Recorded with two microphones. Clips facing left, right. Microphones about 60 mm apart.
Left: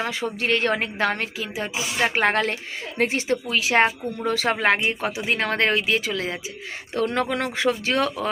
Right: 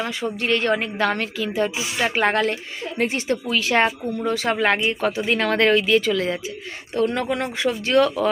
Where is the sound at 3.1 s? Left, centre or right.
Left.